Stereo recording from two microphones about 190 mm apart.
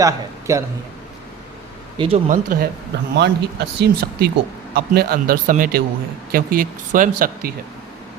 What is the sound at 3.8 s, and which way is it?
Speech, 55° right (ahead or behind).